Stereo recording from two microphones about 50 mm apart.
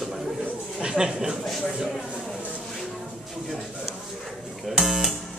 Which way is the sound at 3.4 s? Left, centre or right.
Centre.